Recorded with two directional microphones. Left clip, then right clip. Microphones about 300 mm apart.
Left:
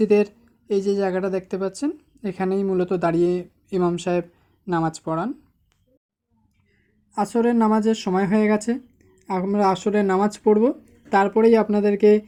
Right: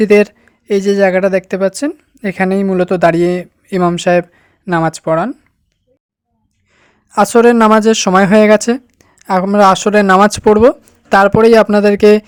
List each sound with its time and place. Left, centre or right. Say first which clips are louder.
0.0 s speech: right 9 dB; right
7.1 s speech: right 13 dB; right